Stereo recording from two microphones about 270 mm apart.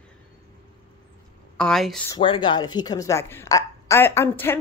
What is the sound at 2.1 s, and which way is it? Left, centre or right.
Speech, centre.